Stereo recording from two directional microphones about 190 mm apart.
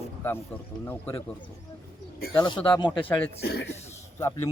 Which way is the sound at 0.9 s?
10° left (ahead or behind).